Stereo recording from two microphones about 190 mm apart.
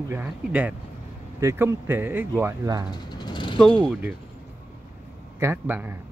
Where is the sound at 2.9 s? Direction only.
20° left (ahead or behind).